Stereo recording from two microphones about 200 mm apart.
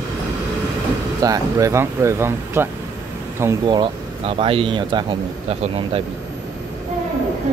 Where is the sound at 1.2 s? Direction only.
15° right (ahead or behind).